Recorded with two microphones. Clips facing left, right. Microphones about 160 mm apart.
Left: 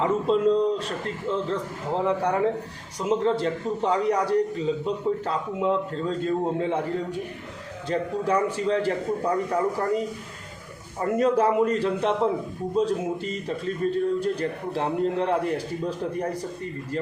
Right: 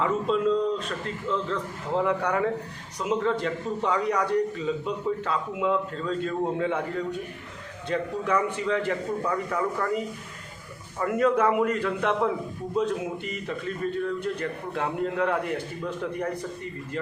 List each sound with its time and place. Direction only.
0.0 s a man's voice: 35° left (ahead or behind)
7.9 s a man's voice: 35° left (ahead or behind)
11.0 s a man's voice: 30° left (ahead or behind)